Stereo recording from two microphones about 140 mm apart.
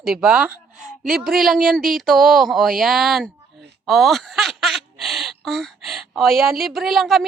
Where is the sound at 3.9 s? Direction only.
Centre (ahead or behind).